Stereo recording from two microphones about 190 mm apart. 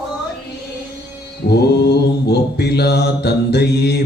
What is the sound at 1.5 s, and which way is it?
Mantra, 60° left (ahead or behind).